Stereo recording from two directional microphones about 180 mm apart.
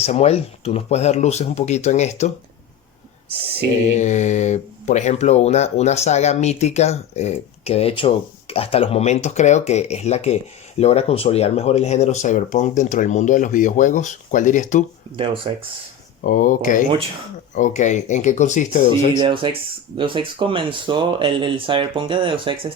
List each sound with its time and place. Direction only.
0.0 s speech: 35° left (ahead or behind)
3.9 s speech: 40° left (ahead or behind)
15.1 s speech: 30° right (ahead or behind)
16.2 s speech: 50° left (ahead or behind)
19.2 s speech: 30° right (ahead or behind)